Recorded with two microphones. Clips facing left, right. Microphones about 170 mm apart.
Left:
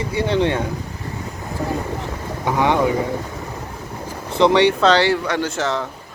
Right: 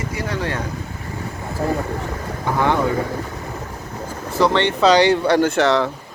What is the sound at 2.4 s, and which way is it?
Speech, 15° left (ahead or behind).